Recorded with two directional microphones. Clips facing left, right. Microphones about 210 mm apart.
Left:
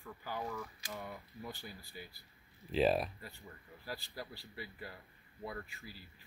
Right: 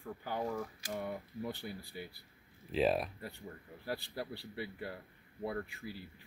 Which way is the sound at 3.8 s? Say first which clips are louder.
Right 5 dB; 60° right (ahead or behind).